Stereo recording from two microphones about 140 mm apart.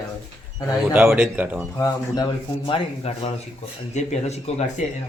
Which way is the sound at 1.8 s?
30° left (ahead or behind).